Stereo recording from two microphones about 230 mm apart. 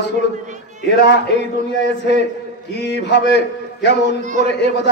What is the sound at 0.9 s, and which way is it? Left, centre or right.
Speech, left.